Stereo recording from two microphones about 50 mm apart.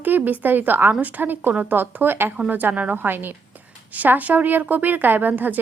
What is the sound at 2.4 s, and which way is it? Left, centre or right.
A woman's voice, right.